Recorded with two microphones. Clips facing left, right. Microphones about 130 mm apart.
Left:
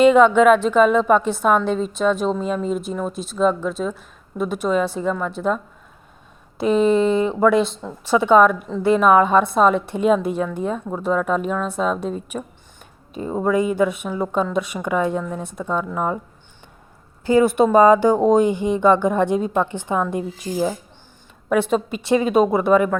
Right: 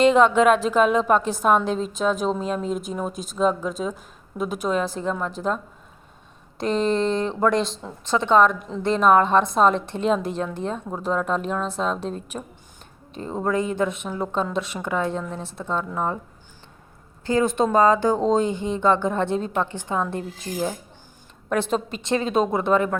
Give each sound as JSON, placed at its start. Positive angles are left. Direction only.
{"t": 0.0, "sound": "a woman's voice", "side_deg": 0}
{"t": 3.1, "sound": "a woman's voice", "side_deg": -45}
{"t": 3.3, "sound": "a woman's voice", "side_deg": 0}
{"t": 6.6, "sound": "a woman's voice", "side_deg": 5}
{"t": 17.2, "sound": "speech", "side_deg": 10}